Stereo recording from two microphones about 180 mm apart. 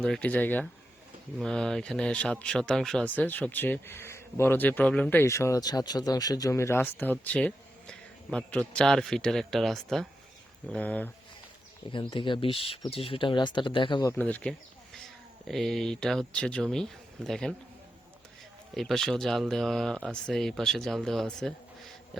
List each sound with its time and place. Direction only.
0.0 s speech: 5° left (ahead or behind)
11.9 s speech: 25° left (ahead or behind)
14.1 s speech: 10° left (ahead or behind)
18.7 s speech: centre (ahead or behind)